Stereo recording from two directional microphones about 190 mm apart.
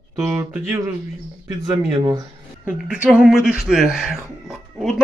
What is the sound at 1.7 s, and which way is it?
Speech, 20° right (ahead or behind).